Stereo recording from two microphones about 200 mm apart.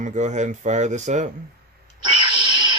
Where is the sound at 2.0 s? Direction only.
25° right (ahead or behind).